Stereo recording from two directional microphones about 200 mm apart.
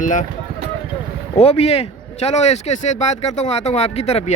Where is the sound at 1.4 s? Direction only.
30° left (ahead or behind).